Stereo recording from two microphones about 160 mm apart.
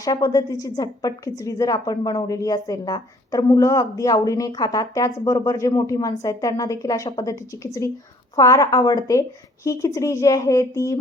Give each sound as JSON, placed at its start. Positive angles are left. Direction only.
{"t": 0.0, "sound": "a woman's voice", "side_deg": 25}